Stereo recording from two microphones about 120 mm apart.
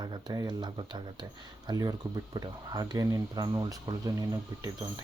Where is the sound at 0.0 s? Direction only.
35° right (ahead or behind).